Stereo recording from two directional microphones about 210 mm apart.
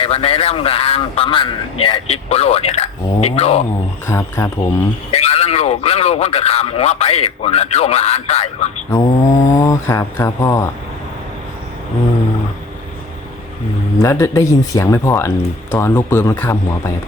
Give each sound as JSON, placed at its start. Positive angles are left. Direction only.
{"t": 0.0, "sound": "a man's voice", "side_deg": 30}
{"t": 4.0, "sound": "speech", "side_deg": 15}
{"t": 5.1, "sound": "a man's voice", "side_deg": 30}
{"t": 8.9, "sound": "speech", "side_deg": 15}
{"t": 14.0, "sound": "speech", "side_deg": 15}